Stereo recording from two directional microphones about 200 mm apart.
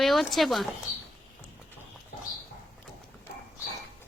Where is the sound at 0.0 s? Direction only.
Centre (ahead or behind).